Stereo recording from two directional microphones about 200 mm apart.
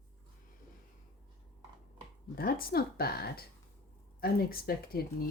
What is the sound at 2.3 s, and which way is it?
Speech, 50° left (ahead or behind).